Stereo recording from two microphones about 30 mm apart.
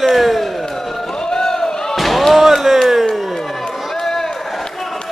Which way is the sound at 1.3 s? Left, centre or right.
Centre.